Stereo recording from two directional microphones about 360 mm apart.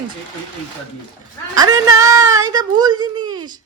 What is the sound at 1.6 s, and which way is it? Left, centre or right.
Speech, centre.